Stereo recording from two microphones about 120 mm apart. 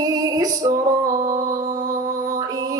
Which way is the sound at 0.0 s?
30° right (ahead or behind).